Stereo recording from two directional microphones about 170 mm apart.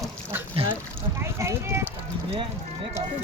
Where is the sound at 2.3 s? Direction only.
30° right (ahead or behind).